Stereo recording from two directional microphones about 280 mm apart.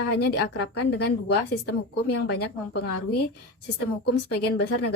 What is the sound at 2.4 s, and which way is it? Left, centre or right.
Speech, left.